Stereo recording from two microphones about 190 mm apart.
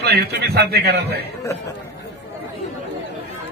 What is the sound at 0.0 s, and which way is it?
A man's voice, 60° right (ahead or behind).